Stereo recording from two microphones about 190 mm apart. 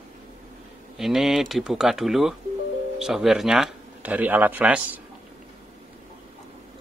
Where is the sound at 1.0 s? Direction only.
Centre (ahead or behind).